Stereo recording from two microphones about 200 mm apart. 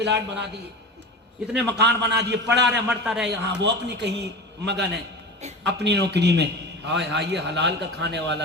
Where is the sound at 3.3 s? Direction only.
60° right (ahead or behind).